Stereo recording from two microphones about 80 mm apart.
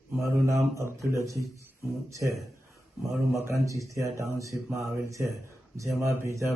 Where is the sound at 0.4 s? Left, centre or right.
Right.